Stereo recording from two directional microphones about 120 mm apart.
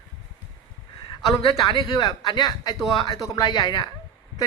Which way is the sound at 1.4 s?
40° left (ahead or behind).